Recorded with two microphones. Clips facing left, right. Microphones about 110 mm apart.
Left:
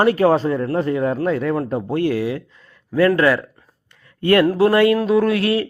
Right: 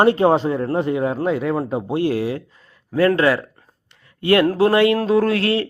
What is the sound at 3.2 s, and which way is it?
Speech, 20° right (ahead or behind).